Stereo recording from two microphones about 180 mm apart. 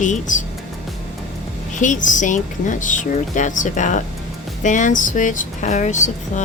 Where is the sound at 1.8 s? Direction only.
45° left (ahead or behind).